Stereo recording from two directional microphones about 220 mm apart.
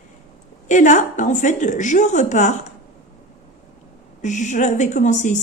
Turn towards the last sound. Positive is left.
turn(degrees=35)  # may be behind; listen again after turning